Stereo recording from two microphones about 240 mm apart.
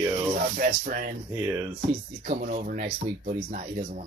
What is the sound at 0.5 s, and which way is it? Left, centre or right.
Speech, right.